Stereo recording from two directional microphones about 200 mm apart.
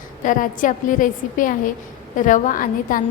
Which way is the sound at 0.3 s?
40° left (ahead or behind).